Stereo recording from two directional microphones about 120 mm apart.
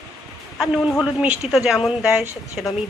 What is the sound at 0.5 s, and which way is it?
A woman's voice, centre (ahead or behind).